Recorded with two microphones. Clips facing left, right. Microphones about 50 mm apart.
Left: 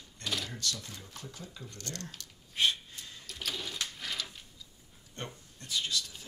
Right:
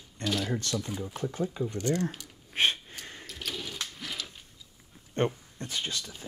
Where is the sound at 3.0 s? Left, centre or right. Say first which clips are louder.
Right 5 dB; right.